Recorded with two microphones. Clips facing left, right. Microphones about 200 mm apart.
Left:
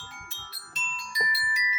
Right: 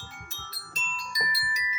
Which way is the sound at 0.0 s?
40° right (ahead or behind).